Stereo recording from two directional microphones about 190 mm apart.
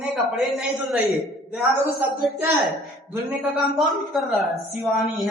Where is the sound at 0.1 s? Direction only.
Centre (ahead or behind).